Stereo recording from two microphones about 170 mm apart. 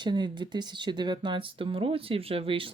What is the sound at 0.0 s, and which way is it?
Speech, 25° right (ahead or behind).